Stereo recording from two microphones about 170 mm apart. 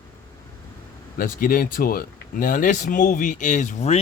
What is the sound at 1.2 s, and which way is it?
Speech, 55° left (ahead or behind).